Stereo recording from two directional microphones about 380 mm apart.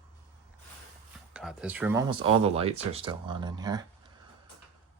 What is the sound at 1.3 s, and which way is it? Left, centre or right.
Speech, centre.